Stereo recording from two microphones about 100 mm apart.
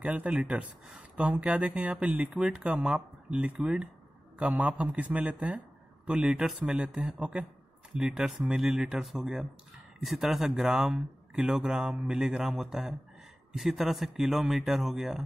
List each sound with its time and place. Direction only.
0.0 s speech: 15° right (ahead or behind)